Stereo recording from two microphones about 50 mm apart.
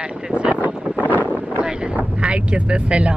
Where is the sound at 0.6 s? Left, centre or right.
Right.